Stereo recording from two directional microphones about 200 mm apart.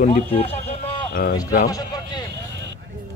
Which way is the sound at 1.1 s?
45° left (ahead or behind).